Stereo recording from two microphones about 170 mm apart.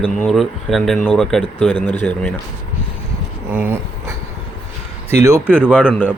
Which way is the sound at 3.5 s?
15° right (ahead or behind).